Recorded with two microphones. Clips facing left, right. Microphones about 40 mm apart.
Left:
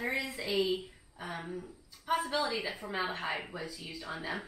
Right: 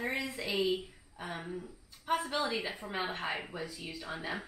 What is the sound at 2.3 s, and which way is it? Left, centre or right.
A woman's voice, centre.